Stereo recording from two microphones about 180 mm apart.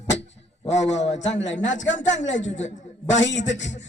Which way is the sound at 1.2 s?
90° left.